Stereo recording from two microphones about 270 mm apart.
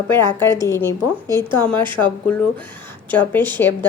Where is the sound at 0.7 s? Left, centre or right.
Centre.